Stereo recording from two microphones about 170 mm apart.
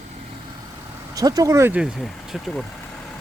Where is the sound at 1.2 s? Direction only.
20° right (ahead or behind).